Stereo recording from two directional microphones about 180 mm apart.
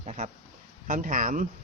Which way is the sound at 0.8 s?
50° right (ahead or behind).